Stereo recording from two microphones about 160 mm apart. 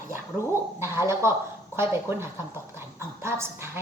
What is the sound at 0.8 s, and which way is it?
A woman's voice, 15° right (ahead or behind).